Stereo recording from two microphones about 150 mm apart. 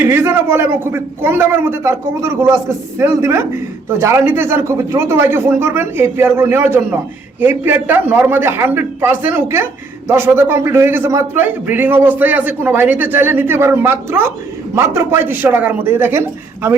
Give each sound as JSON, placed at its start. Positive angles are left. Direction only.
{"t": 0.0, "sound": "a man's voice", "side_deg": -15}